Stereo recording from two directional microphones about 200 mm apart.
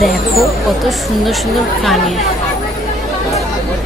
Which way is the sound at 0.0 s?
Centre (ahead or behind).